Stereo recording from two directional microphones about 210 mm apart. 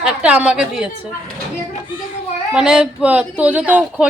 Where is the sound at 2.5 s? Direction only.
5° right (ahead or behind).